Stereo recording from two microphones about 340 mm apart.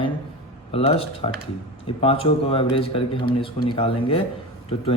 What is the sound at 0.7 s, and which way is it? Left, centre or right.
Speech, centre.